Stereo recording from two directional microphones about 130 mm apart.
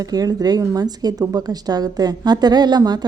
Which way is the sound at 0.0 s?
30° right (ahead or behind).